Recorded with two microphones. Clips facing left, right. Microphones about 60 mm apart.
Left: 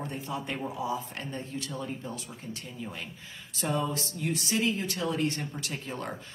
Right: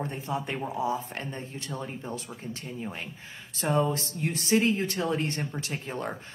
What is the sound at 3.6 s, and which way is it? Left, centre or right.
Speech, right.